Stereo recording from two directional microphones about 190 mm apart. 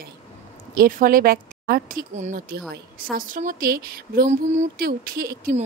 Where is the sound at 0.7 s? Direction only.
50° right (ahead or behind).